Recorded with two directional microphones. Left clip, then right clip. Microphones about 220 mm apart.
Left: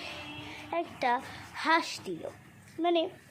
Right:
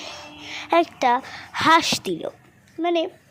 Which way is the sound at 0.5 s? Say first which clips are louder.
Right 15 dB; 50° right (ahead or behind).